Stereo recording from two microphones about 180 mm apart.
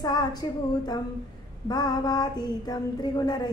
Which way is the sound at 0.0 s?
20° left (ahead or behind).